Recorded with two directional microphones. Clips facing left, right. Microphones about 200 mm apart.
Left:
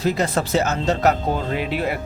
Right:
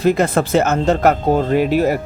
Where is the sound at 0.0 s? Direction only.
55° right (ahead or behind).